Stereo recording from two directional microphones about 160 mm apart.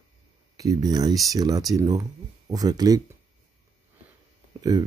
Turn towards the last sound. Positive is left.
turn(degrees=-25)  # may be behind; listen again after turning